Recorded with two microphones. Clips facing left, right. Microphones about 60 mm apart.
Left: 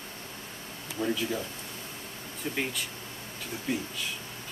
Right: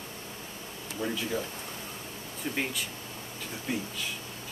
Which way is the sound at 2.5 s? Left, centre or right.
Centre.